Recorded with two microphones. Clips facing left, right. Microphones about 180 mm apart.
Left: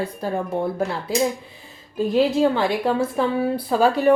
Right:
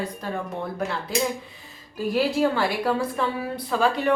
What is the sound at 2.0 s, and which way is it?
A woman's voice, 20° left (ahead or behind).